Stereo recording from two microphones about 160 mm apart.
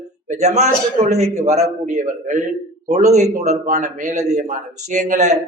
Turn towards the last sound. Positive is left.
turn(degrees=-45)  # may be behind; listen again after turning